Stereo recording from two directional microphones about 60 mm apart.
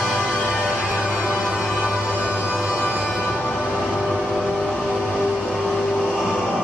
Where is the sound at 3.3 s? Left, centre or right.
Left.